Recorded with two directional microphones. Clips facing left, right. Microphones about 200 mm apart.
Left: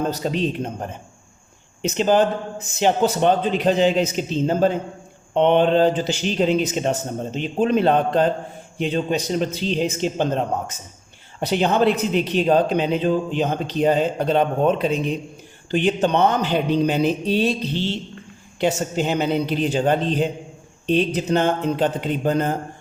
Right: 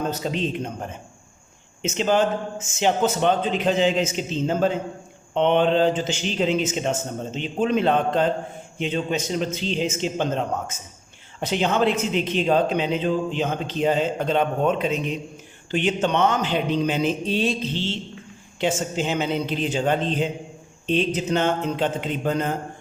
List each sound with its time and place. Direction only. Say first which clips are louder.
0.1 s a man's voice: left 3 dB; 35° left (ahead or behind)